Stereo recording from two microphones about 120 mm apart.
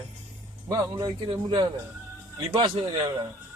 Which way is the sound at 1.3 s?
35° right (ahead or behind).